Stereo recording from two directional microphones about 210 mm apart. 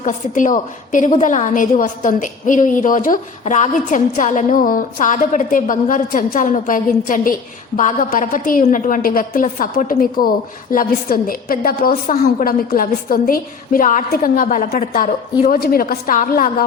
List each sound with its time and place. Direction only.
0.0 s a woman's voice: 40° left (ahead or behind)